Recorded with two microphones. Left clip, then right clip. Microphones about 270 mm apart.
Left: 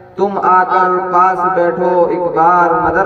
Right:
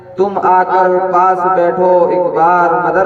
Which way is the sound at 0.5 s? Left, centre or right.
Right.